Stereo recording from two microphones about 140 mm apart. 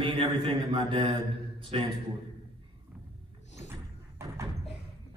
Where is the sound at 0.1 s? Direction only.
40° right (ahead or behind).